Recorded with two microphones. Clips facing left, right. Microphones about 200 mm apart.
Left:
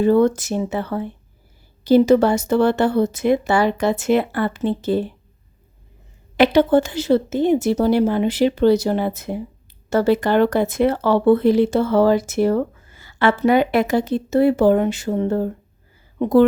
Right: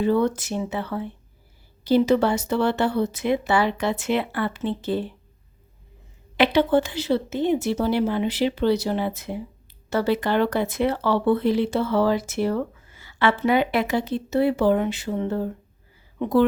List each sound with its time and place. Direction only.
0.0 s speech: 45° left (ahead or behind)
6.3 s speech: 45° left (ahead or behind)